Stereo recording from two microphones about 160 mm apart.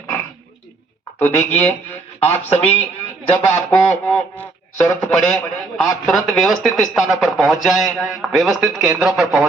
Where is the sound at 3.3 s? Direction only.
15° left (ahead or behind).